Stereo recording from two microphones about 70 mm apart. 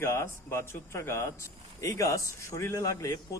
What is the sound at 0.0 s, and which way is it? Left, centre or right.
A man's voice, left.